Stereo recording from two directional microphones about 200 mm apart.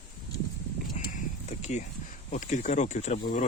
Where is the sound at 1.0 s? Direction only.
35° left (ahead or behind).